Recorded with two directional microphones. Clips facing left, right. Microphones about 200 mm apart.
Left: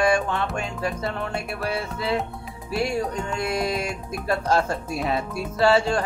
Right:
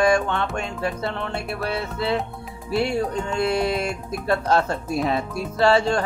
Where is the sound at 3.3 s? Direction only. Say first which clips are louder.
Right 4 dB; 30° right (ahead or behind).